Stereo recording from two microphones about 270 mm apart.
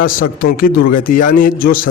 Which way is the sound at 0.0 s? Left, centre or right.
Left.